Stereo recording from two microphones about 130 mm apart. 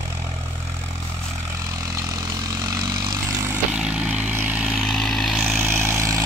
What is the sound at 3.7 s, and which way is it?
Vehicle, 10° right (ahead or behind).